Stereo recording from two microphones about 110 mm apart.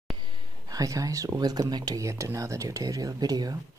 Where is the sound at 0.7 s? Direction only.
30° right (ahead or behind).